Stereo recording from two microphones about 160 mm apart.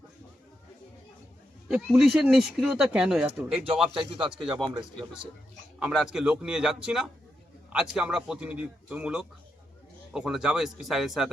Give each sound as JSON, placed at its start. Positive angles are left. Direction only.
{"t": 1.6, "sound": "speech", "side_deg": -5}
{"t": 3.5, "sound": "speech", "side_deg": -35}
{"t": 4.4, "sound": "speech", "side_deg": 0}
{"t": 5.8, "sound": "a man's voice", "side_deg": -5}